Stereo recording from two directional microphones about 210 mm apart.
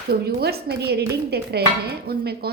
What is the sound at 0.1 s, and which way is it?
Dishes, 50° right (ahead or behind).